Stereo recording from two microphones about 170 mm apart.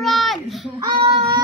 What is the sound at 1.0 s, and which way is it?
Speech, 30° right (ahead or behind).